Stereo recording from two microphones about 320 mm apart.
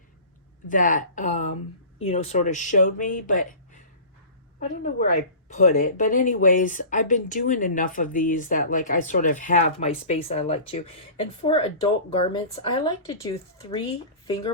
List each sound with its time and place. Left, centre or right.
0.7 s speech: left
4.8 s speech: left